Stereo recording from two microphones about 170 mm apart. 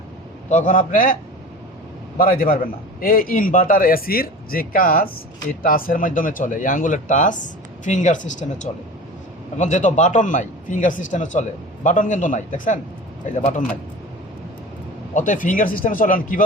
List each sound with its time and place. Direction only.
0.5 s a man's voice: 50° left (ahead or behind)
2.1 s a man's voice: 60° left (ahead or behind)
15.1 s a man's voice: 50° left (ahead or behind)